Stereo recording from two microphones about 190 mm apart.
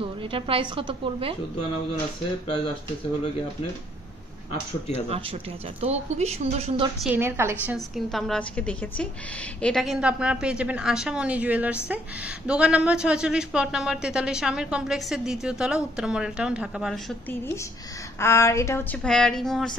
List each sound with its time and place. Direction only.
0.0 s a woman's voice: 30° right (ahead or behind)
5.8 s a woman's voice: 35° right (ahead or behind)
7.0 s a woman's voice: 10° right (ahead or behind)
7.6 s speech: centre (ahead or behind)
18.2 s speech: 15° left (ahead or behind)